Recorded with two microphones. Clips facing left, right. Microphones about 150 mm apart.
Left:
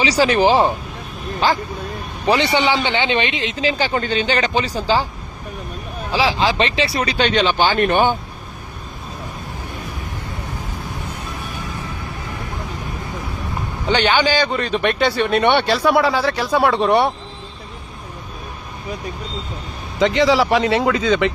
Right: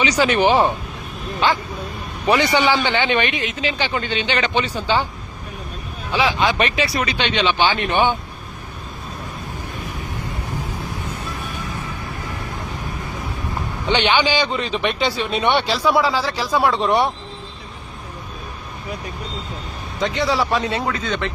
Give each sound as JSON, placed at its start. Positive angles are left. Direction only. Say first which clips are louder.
{"t": 0.0, "sound": "speech", "louder": "left 2 dB", "side_deg": 35}
{"t": 6.1, "sound": "speech", "louder": "left 1 dB", "side_deg": 30}
{"t": 13.8, "sound": "a man's voice", "louder": "left 1 dB", "side_deg": 40}
{"t": 20.1, "sound": "speech", "louder": "left 4 dB", "side_deg": 90}